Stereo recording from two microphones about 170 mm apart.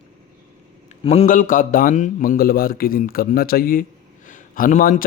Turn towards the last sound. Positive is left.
turn(degrees=55)  # may be behind; listen again after turning